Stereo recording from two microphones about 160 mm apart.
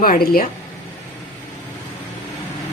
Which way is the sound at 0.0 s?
65° left (ahead or behind).